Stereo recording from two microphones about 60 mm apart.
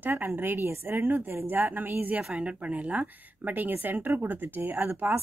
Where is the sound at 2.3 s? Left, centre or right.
Right.